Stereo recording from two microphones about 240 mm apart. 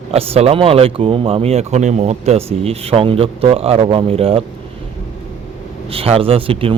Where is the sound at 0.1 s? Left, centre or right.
Right.